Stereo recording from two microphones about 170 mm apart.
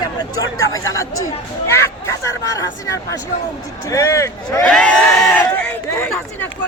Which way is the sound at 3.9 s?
15° left (ahead or behind).